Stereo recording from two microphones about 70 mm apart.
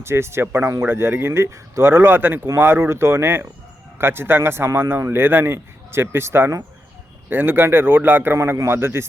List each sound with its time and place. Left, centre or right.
0.0 s a man's voice: right
8.4 s a man's voice: right